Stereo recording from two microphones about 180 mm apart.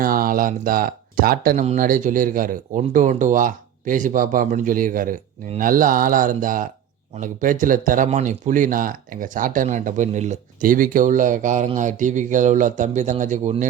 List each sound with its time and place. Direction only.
0.0 s speech: 50° right (ahead or behind)